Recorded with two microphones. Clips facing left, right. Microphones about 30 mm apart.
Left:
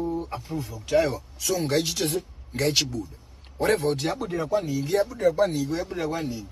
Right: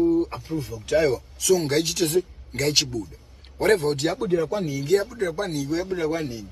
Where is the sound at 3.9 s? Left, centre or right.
Right.